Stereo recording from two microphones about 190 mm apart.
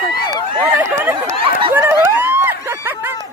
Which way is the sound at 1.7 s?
10° right (ahead or behind).